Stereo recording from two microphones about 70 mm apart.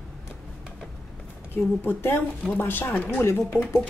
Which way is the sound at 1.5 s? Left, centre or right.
Left.